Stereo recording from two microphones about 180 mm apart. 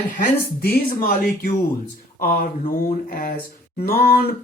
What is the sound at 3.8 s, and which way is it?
Speech, 55° left (ahead or behind).